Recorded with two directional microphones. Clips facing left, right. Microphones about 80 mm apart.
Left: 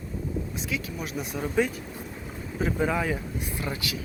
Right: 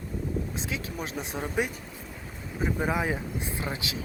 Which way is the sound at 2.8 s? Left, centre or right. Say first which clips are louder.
Left 2 dB; centre.